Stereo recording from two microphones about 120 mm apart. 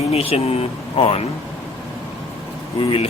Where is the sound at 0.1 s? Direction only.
55° left (ahead or behind).